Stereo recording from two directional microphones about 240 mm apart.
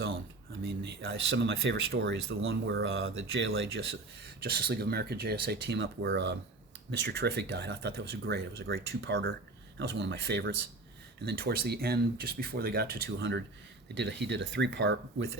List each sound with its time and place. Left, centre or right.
0.6 s speech: right
4.4 s speech: right